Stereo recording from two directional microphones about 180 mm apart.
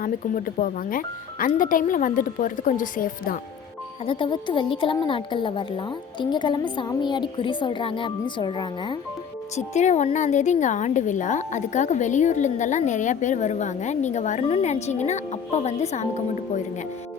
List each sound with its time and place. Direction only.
0.0 s speech: 50° left (ahead or behind)
4.0 s a woman's voice: 30° left (ahead or behind)
9.6 s a woman's voice: 40° left (ahead or behind)